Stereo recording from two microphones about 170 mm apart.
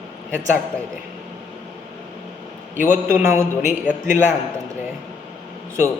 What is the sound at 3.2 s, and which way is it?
Speech, 15° right (ahead or behind).